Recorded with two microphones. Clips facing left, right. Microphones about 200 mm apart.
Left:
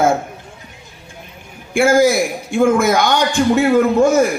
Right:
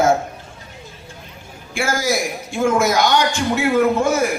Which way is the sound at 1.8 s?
55° left (ahead or behind).